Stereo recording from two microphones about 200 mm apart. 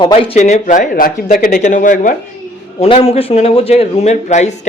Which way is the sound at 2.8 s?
30° left (ahead or behind).